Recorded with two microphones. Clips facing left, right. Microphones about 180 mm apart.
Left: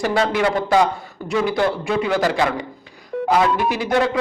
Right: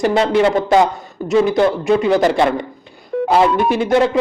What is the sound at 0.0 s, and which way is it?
A man's voice, 20° right (ahead or behind).